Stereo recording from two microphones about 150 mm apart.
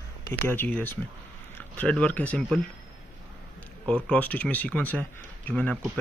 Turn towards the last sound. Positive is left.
turn(degrees=10)  # may be behind; listen again after turning